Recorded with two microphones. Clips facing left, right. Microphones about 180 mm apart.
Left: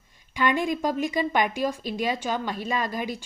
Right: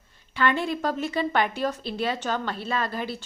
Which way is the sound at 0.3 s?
15° left (ahead or behind).